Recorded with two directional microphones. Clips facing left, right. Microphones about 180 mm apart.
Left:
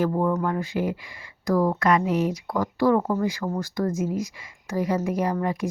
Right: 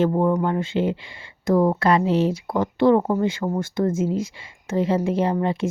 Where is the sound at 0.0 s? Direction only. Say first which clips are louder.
Right 3 dB; 25° right (ahead or behind).